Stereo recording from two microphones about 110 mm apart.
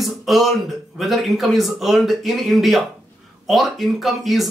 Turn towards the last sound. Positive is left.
turn(degrees=0)  # may be behind; listen again after turning